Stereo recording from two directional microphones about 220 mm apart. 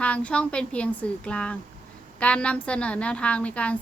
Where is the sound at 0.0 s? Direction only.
5° left (ahead or behind).